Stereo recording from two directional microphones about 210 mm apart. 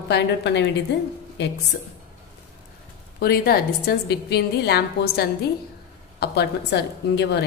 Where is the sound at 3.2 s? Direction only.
45° left (ahead or behind).